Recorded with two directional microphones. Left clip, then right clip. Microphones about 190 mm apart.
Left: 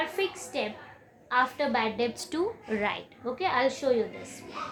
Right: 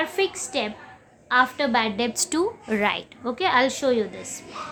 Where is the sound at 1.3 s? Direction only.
30° right (ahead or behind).